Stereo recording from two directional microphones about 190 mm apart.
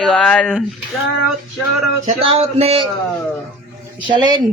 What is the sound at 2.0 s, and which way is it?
Speech, 30° right (ahead or behind).